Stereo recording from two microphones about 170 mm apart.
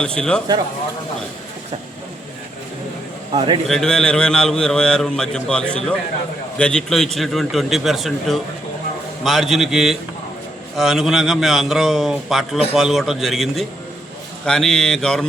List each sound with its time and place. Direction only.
0.0 s a man's voice: 5° left (ahead or behind)
3.3 s a man's voice: 30° right (ahead or behind)
3.7 s a man's voice: 5° left (ahead or behind)